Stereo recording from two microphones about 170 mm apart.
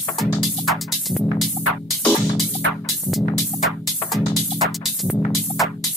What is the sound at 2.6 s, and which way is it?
Music, 90° right.